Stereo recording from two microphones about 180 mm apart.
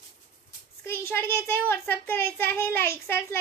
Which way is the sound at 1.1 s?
15° left (ahead or behind).